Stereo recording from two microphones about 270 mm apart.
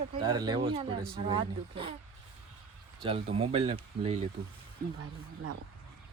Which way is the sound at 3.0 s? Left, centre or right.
Right.